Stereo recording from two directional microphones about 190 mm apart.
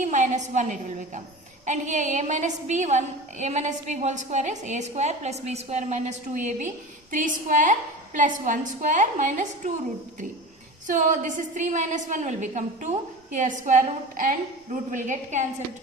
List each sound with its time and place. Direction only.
0.0 s a woman's voice: 40° right (ahead or behind)
10.8 s a woman's voice: 40° right (ahead or behind)